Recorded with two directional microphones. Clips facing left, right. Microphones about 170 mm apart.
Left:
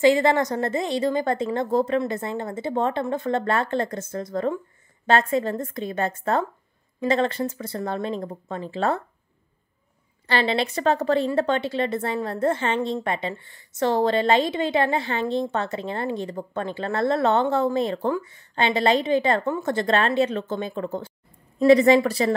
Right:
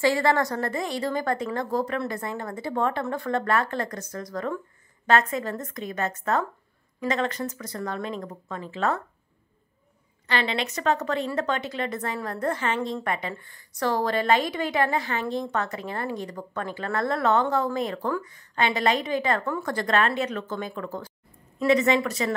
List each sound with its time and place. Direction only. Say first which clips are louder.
0.0 s speech: left 4 dB; 20° left (ahead or behind)
10.2 s speech: left 4 dB; 35° left (ahead or behind)